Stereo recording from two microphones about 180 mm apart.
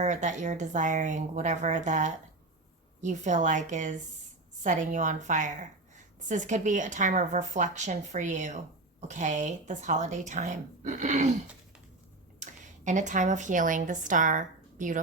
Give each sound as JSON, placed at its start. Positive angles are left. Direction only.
{"t": 0.0, "sound": "a woman's voice", "side_deg": -40}
{"t": 12.4, "sound": "speech", "side_deg": -45}